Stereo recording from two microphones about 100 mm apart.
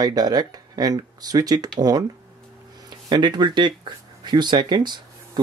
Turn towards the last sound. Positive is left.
turn(degrees=-50)  # may be behind; listen again after turning